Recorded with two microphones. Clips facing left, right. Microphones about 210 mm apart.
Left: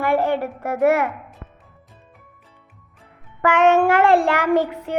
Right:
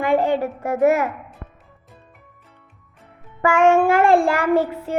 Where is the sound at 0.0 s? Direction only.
15° right (ahead or behind).